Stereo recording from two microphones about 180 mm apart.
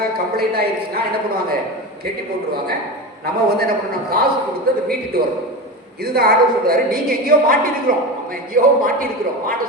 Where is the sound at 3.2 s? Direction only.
60° right (ahead or behind).